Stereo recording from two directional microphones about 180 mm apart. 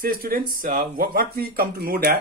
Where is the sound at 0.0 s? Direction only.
55° right (ahead or behind).